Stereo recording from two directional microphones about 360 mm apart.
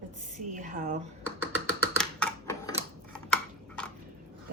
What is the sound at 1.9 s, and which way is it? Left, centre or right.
Typewriter, centre.